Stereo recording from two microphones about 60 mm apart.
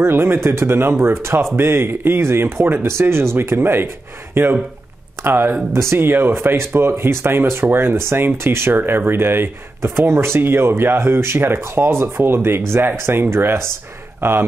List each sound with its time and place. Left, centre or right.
0.0 s speech: right
9.8 s speech: right